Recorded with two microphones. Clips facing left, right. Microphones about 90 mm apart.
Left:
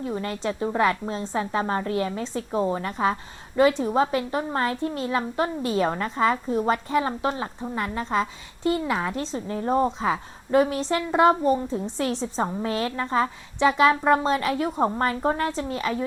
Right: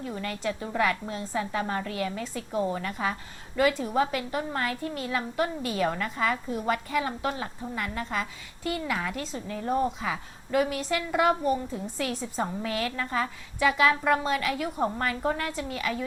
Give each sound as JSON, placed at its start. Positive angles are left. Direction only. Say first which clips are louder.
{"t": 0.0, "sound": "a woman's voice", "louder": "left 4 dB", "side_deg": 25}